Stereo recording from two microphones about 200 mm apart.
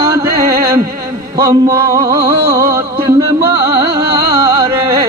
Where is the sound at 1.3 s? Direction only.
20° right (ahead or behind).